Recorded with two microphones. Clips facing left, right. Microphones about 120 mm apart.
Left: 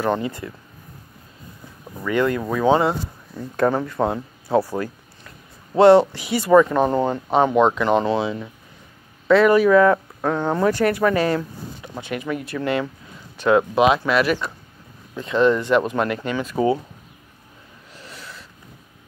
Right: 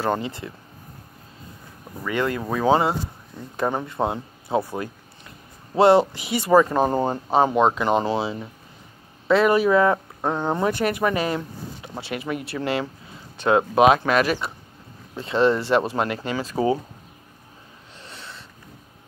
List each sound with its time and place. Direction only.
0.1 s speech: 25° right (ahead or behind)
2.0 s speech: 20° right (ahead or behind)
3.5 s speech: 15° right (ahead or behind)
6.1 s speech: 25° right (ahead or behind)
7.5 s speech: 20° right (ahead or behind)
13.7 s speech: 45° right (ahead or behind)
14.2 s speech: 30° right (ahead or behind)
17.9 s wheeze: 25° right (ahead or behind)